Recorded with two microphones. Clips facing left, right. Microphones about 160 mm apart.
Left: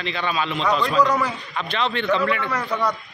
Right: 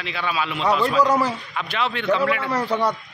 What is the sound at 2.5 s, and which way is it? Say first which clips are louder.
Speech: right 2 dB; 30° right (ahead or behind).